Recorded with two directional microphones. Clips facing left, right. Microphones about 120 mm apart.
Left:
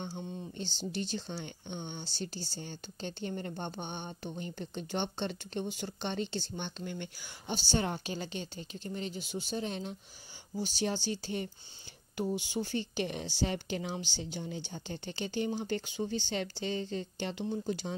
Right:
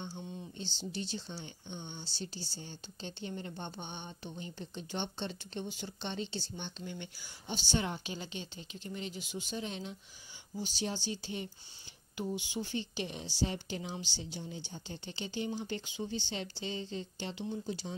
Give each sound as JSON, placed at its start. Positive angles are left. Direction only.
{"t": 0.0, "sound": "a sound", "side_deg": 55}
{"t": 0.9, "sound": "speech", "side_deg": 50}
{"t": 1.3, "sound": "speech", "side_deg": 65}
{"t": 7.5, "sound": "speech", "side_deg": 40}